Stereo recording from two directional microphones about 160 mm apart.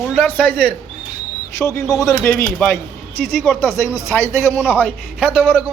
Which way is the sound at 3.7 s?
20° left (ahead or behind).